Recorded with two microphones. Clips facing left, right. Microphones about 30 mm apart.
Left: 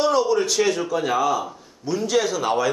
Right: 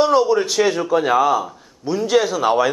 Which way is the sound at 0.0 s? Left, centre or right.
Centre.